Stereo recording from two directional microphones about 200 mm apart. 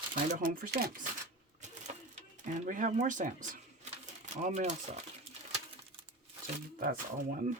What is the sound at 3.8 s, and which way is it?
Crumpling, 35° right (ahead or behind).